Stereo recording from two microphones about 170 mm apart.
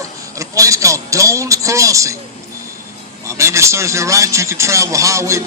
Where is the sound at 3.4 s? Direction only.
15° right (ahead or behind).